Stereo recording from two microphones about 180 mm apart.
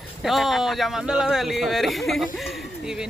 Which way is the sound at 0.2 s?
Centre (ahead or behind).